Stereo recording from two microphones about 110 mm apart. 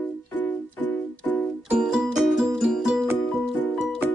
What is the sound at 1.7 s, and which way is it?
Music, 5° right (ahead or behind).